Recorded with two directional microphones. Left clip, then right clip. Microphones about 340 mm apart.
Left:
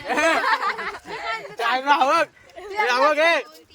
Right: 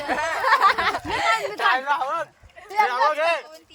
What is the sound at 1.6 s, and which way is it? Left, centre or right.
Speech, left.